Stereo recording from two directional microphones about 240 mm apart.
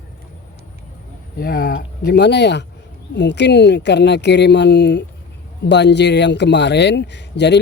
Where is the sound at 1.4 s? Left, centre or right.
Left.